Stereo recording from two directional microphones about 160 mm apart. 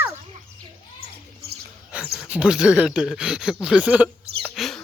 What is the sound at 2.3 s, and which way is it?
Speech, 5° right (ahead or behind).